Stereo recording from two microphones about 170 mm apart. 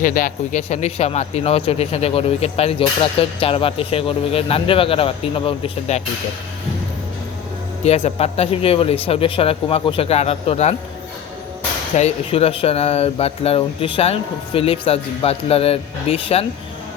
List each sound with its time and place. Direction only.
0.0 s speech: 55° left (ahead or behind); by 6.0 s 35° left (ahead or behind)
7.9 s speech: 40° left (ahead or behind)
11.9 s speech: 40° left (ahead or behind)